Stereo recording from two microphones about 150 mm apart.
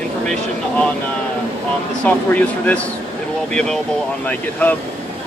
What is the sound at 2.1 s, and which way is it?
Speech, 10° left (ahead or behind).